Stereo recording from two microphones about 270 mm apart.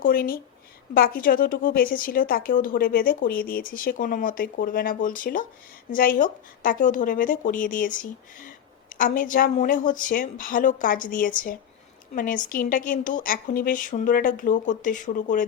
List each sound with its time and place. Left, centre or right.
0.0 s a woman's voice: left